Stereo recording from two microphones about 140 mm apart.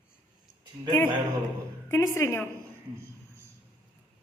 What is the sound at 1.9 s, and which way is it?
Speech, 20° left (ahead or behind).